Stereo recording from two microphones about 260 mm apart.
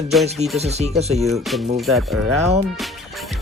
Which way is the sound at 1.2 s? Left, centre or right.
Centre.